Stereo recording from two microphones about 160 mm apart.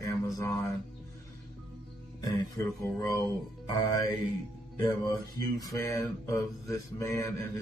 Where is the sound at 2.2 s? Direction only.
20° left (ahead or behind).